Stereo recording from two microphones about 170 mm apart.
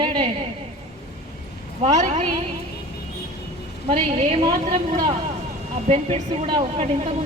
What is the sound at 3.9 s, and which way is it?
Speech, 30° right (ahead or behind).